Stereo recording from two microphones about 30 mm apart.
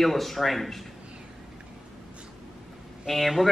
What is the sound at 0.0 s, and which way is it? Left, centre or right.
Speech, centre.